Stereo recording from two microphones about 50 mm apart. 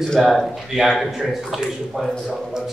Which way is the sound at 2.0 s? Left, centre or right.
Centre.